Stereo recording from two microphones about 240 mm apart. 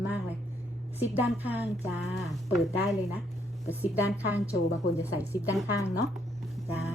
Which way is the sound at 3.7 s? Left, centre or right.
Centre.